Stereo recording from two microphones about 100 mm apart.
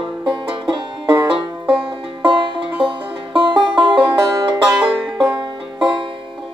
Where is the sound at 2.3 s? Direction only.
55° right (ahead or behind).